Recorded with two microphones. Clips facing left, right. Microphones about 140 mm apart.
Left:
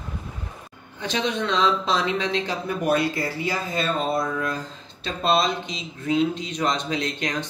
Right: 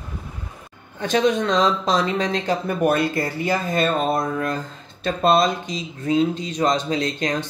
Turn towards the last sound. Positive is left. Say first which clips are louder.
# right 4 dB
turn(degrees=-35)  # may be behind; listen again after turning